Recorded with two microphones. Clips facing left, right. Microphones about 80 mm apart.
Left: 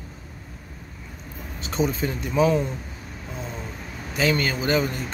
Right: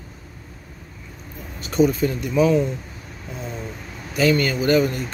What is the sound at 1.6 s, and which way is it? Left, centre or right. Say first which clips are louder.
A man's voice: right 6 dB; left.